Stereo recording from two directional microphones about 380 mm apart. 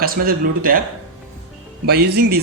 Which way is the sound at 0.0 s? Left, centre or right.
Right.